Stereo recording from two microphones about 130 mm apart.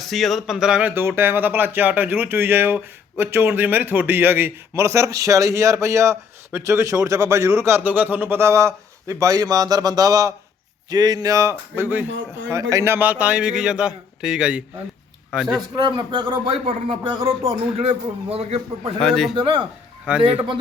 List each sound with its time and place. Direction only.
0.0 s speech: centre (ahead or behind); by 11.5 s 25° right (ahead or behind)
11.7 s a man's voice: 15° right (ahead or behind)
15.7 s speech: 35° right (ahead or behind)
17.8 s a man's voice: 50° right (ahead or behind)
19.0 s a man's voice: 5° left (ahead or behind)
19.3 s speech: 40° right (ahead or behind)
20.1 s a man's voice: 10° right (ahead or behind)